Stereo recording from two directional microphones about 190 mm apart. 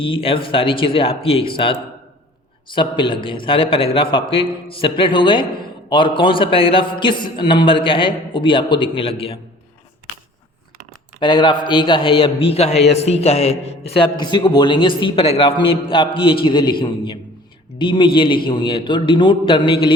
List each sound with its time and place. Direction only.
0.0 s a man's voice: 30° left (ahead or behind)
11.2 s a man's voice: 25° left (ahead or behind)